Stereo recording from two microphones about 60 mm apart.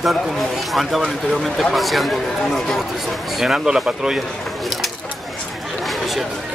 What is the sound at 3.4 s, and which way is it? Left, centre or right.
Speech, centre.